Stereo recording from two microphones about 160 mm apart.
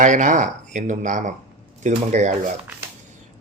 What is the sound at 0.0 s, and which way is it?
Speech, 50° right (ahead or behind).